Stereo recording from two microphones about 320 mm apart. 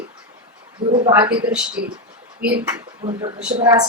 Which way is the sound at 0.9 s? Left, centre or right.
Centre.